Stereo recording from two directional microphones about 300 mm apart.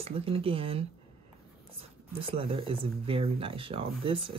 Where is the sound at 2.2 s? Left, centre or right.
Centre.